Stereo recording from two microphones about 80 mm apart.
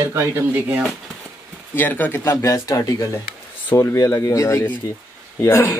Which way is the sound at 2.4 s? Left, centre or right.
Left.